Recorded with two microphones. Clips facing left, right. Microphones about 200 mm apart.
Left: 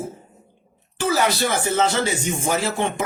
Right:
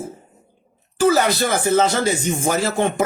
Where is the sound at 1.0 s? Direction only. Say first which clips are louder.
Right 4 dB; 45° right (ahead or behind).